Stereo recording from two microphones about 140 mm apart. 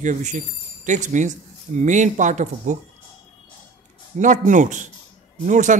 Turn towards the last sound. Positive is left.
turn(degrees=-65)  # may be behind; listen again after turning